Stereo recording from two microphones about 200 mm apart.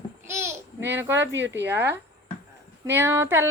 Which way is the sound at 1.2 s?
65° right (ahead or behind).